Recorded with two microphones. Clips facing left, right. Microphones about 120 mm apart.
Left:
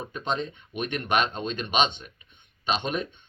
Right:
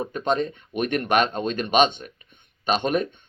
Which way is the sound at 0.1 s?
45° right (ahead or behind).